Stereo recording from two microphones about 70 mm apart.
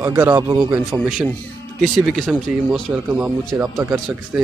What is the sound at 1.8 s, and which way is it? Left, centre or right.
Speech, centre.